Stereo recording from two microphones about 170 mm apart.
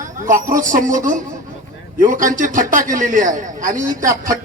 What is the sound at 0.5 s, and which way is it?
Speech, 50° right (ahead or behind).